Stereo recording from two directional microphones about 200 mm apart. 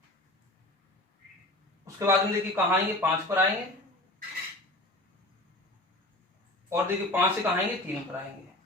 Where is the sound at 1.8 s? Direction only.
15° right (ahead or behind).